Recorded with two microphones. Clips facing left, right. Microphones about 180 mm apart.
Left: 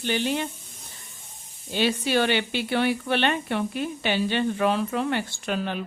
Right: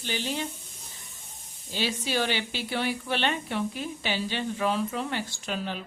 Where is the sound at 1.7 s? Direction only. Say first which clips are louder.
Left 6 dB; 60° left (ahead or behind).